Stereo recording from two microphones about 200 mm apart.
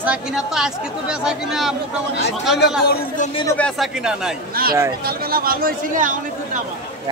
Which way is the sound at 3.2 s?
25° left (ahead or behind).